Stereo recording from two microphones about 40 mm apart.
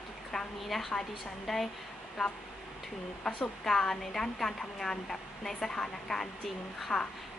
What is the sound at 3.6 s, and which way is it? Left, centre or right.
Speech, centre.